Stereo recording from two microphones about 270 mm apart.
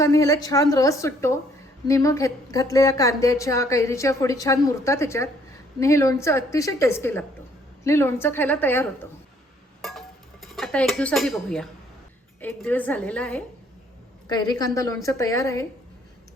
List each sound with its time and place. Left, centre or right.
0.0 s a woman's voice: centre
10.4 s a woman's voice: centre
14.3 s a woman's voice: centre